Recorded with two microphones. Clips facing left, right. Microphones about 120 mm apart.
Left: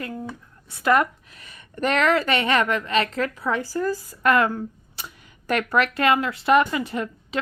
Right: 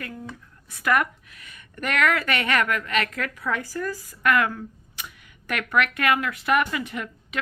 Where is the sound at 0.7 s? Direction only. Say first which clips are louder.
Left 3 dB; 25° left (ahead or behind).